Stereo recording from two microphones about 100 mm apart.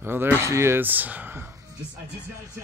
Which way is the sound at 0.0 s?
20° right (ahead or behind).